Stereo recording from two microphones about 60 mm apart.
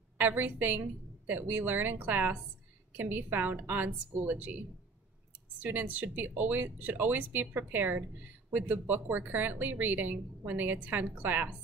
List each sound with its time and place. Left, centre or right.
0.2 s speech: right